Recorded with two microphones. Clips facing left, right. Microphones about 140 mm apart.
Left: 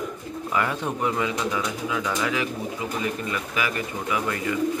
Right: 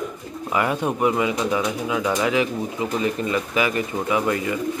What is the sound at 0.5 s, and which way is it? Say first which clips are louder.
Speech: right 4 dB; 15° right (ahead or behind).